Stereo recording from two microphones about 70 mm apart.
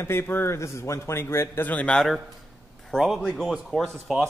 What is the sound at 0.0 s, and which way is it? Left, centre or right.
Speech, left.